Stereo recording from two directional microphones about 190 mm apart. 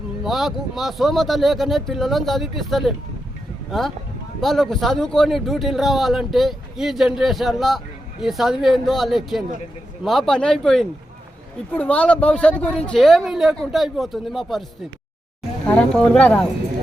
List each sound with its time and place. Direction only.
0.3 s speech: centre (ahead or behind)
15.6 s speech: 5° left (ahead or behind)